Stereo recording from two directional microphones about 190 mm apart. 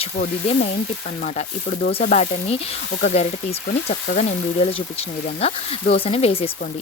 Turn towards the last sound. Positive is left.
turn(degrees=30)  # may be behind; listen again after turning